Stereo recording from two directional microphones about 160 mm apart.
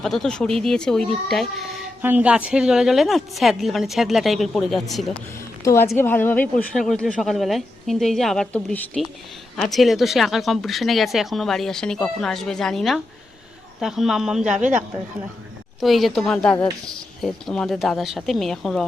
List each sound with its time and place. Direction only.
0.0 s speech: centre (ahead or behind)
2.0 s speech: 10° right (ahead or behind)
5.6 s a woman's voice: 15° left (ahead or behind); by 14.8 s 5° right (ahead or behind)
15.8 s speech: centre (ahead or behind)